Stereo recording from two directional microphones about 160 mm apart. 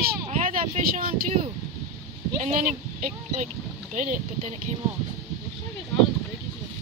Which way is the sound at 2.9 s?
50° right (ahead or behind).